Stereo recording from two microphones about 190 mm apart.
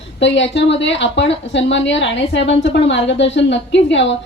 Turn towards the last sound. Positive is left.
turn(degrees=70)  # may be behind; listen again after turning